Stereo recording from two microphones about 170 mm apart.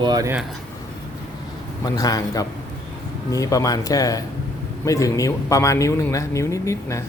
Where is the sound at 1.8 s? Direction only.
20° left (ahead or behind).